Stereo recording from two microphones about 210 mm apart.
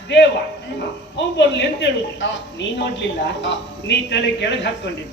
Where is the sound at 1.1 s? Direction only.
55° left (ahead or behind).